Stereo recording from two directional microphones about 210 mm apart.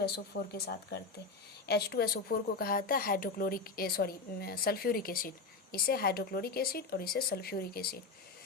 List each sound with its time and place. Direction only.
0.0 s speech: 50° left (ahead or behind)